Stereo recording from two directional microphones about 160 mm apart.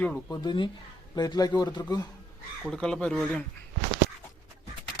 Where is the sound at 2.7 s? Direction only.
5° left (ahead or behind).